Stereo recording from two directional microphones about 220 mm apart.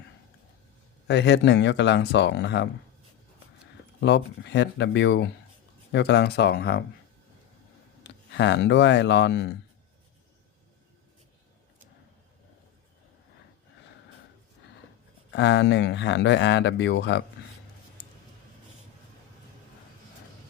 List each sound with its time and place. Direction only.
1.0 s speech: 50° left (ahead or behind)
4.0 s speech: 50° left (ahead or behind)
8.0 s speech: 50° left (ahead or behind)
15.3 s speech: 50° left (ahead or behind)